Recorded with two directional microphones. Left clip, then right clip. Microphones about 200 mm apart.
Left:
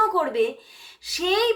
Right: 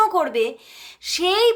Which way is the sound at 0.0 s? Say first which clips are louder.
Right 3 dB; 35° right (ahead or behind).